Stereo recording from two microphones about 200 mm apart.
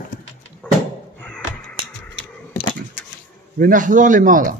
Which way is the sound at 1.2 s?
5° left (ahead or behind).